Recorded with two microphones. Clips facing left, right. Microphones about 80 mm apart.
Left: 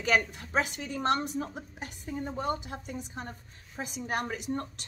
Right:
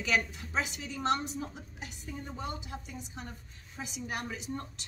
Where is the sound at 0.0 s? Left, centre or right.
Left.